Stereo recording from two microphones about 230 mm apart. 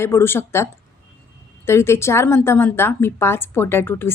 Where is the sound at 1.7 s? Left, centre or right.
Centre.